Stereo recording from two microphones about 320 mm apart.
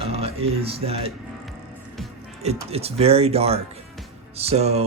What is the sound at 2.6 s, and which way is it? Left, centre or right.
Speech, centre.